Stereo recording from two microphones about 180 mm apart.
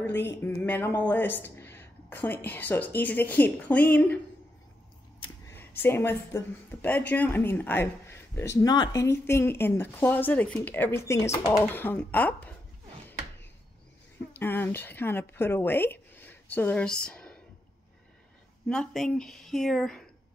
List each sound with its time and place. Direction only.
0.2 s a woman's voice: 15° left (ahead or behind)
5.8 s a woman's voice: 10° left (ahead or behind)
14.3 s a woman's voice: 10° left (ahead or behind)
18.7 s speech: 5° left (ahead or behind)